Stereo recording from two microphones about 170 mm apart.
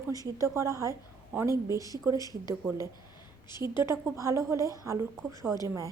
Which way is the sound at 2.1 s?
25° left (ahead or behind).